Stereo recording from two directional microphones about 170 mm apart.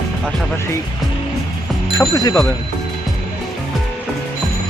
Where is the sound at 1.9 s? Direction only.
20° left (ahead or behind).